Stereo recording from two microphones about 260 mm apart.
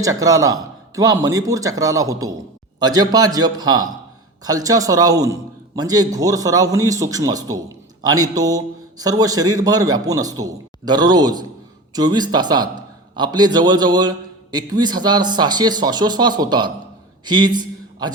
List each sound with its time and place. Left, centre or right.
0.0 s a man's voice: centre